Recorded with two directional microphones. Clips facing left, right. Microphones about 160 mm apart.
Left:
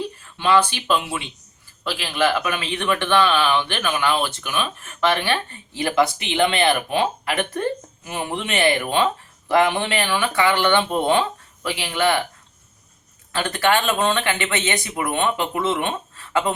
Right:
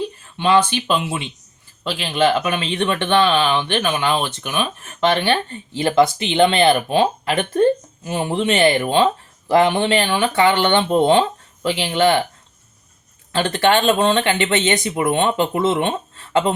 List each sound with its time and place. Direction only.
0.3 s speech: 20° right (ahead or behind)
13.3 s speech: 25° right (ahead or behind)